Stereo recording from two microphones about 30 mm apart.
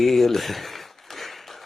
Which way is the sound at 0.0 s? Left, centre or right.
Centre.